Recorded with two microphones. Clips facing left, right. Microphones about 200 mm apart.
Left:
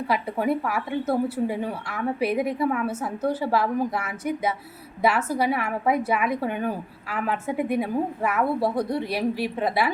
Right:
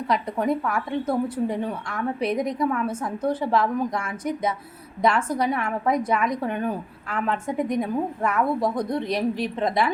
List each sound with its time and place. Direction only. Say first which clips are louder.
0.1 s a woman's voice: right 1 dB; 5° left (ahead or behind)